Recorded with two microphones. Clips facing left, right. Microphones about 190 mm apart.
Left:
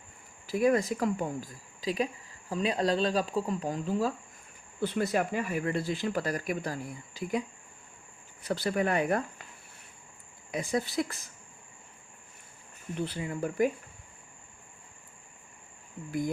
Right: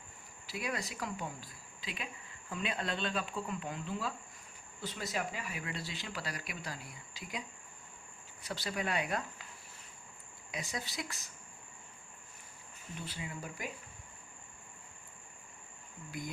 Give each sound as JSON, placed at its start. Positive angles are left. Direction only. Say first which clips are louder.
{"t": 0.4, "sound": "speech", "louder": "left 14 dB", "side_deg": 45}
{"t": 4.8, "sound": "speech", "louder": "left 10 dB", "side_deg": 60}
{"t": 8.4, "sound": "speech", "louder": "left 9 dB", "side_deg": 55}
{"t": 10.5, "sound": "speech", "louder": "left 11 dB", "side_deg": 55}
{"t": 13.1, "sound": "speech", "louder": "left 10 dB", "side_deg": 55}